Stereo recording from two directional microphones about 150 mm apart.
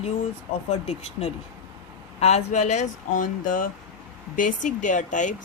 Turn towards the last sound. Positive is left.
turn(degrees=55)  # may be behind; listen again after turning